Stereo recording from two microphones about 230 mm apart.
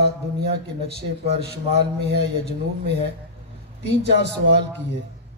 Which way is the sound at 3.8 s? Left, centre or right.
Right.